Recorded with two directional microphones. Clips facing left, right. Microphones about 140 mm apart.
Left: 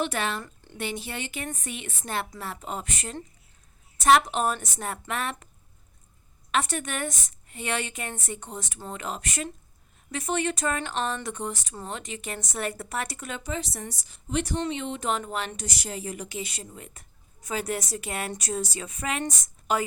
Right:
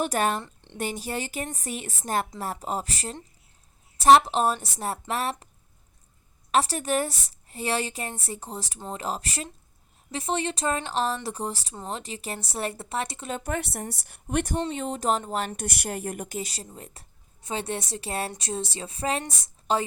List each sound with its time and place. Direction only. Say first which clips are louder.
0.0 s speech: right 3 dB; 45° right (ahead or behind)
0.4 s a sound: even; 25° right (ahead or behind)
0.8 s speech: right 3 dB; 40° right (ahead or behind)
6.5 s a woman's voice: right 4 dB; 35° right (ahead or behind)
13.3 s a woman's voice: right 4 dB; 55° right (ahead or behind)
14.7 s a woman's voice: right 2 dB; 40° right (ahead or behind)